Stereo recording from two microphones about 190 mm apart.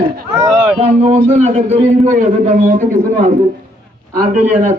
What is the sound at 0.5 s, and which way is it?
Speech, 5° right (ahead or behind).